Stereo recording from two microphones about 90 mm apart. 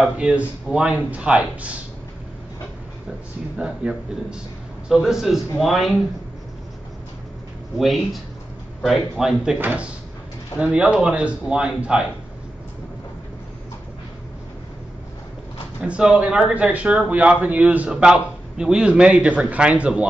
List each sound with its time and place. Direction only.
0.2 s a man's voice: 10° right (ahead or behind)
3.5 s a man's voice: 10° right (ahead or behind)
7.7 s a man's voice: centre (ahead or behind)
15.8 s a man's voice: 10° right (ahead or behind)